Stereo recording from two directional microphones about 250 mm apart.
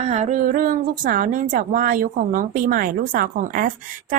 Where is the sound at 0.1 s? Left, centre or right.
Right.